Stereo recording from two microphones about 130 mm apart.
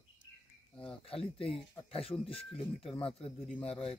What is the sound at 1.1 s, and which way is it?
Speech, 45° left (ahead or behind).